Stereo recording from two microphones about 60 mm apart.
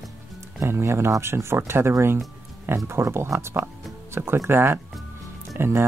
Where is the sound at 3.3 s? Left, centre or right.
Right.